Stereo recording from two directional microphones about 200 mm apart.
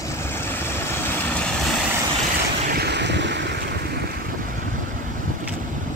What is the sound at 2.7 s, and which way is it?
Waves, 55° right (ahead or behind).